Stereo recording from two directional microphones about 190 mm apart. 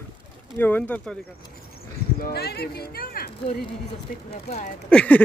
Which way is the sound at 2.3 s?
60° left (ahead or behind).